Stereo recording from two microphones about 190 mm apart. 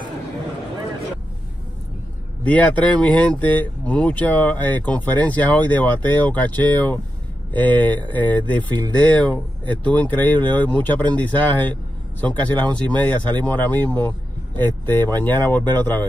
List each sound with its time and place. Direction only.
2.4 s speech: 10° left (ahead or behind)
8.7 s speech: 20° right (ahead or behind)
9.1 s speech: 10° left (ahead or behind)